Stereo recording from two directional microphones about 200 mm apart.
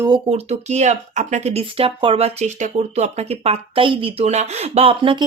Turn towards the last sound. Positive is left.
turn(degrees=-25)  # may be behind; listen again after turning